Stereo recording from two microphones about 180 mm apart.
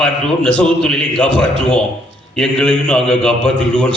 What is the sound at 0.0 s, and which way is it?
A man's voice, 5° left (ahead or behind).